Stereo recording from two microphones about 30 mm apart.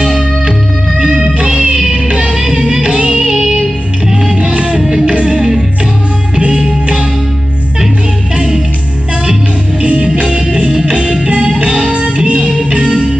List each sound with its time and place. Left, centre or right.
0.0 s music: centre
0.5 s music: centre
2.0 s music: right
2.3 s music: centre
2.8 s music: right
3.2 s music: centre
4.4 s music: right
4.7 s music: centre
6.5 s music: right
9.8 s music: right